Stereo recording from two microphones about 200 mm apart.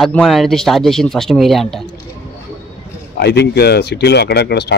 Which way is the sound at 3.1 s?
55° left (ahead or behind).